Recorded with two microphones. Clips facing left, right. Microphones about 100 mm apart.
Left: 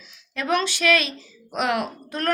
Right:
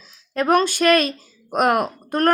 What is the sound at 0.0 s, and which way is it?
Speech, 40° right (ahead or behind).